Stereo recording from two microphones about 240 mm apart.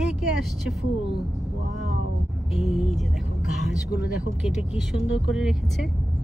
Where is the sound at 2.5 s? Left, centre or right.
Centre.